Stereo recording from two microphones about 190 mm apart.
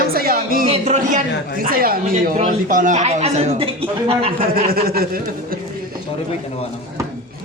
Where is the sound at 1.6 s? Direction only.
50° right (ahead or behind); by 4.3 s 30° right (ahead or behind).